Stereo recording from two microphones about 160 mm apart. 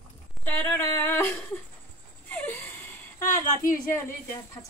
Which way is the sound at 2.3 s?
10° left (ahead or behind).